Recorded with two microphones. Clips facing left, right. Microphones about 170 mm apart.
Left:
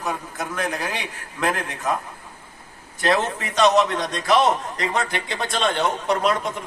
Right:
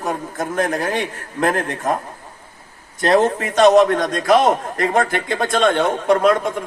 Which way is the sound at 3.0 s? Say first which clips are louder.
Right 6 dB; 45° right (ahead or behind).